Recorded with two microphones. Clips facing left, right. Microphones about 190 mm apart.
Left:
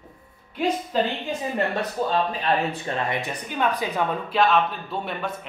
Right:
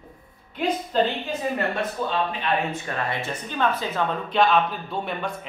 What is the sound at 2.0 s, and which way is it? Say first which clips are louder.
Speech: left 5 dB; 40° left (ahead or behind).